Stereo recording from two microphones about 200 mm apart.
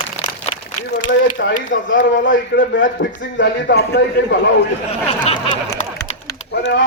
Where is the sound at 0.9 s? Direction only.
65° left (ahead or behind).